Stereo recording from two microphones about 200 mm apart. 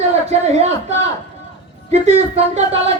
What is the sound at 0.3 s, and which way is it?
A woman's voice, 30° right (ahead or behind).